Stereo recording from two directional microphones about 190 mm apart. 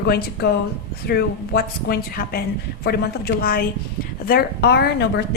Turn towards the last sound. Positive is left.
turn(degrees=60)  # may be behind; listen again after turning